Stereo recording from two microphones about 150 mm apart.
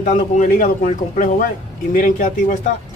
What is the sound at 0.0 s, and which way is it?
Speech, 60° left (ahead or behind).